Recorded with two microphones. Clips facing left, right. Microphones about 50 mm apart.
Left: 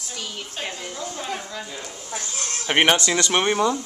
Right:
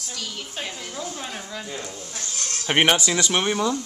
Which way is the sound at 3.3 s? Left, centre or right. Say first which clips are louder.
Left 4 dB; centre.